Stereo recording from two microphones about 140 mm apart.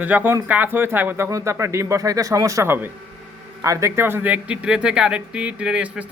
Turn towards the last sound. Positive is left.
turn(degrees=-10)  # may be behind; listen again after turning